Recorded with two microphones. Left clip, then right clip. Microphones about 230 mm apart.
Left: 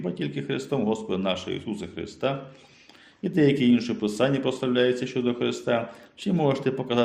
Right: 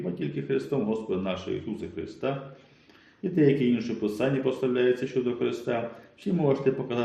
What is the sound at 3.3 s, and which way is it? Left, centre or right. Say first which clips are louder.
Speech: left 2 dB; left.